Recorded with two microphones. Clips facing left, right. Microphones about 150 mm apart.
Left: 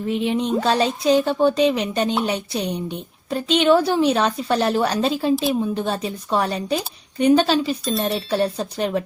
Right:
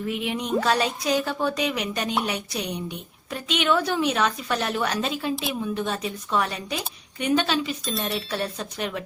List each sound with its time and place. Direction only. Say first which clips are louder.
0.1 s a woman's voice: left 6 dB; 30° left (ahead or behind)